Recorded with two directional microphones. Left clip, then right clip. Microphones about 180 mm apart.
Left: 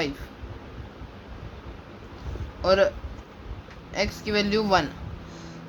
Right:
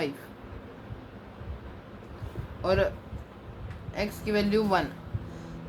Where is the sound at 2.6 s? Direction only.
40° left (ahead or behind).